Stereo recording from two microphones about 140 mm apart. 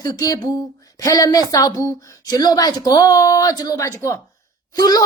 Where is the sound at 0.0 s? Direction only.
25° left (ahead or behind).